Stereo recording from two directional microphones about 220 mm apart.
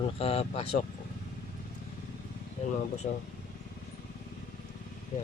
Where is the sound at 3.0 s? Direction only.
40° left (ahead or behind).